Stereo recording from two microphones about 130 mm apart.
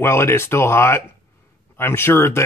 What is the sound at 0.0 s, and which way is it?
Speech, 20° left (ahead or behind).